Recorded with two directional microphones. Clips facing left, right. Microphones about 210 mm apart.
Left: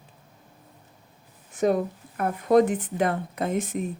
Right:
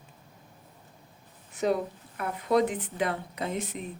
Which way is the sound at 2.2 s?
50° left (ahead or behind).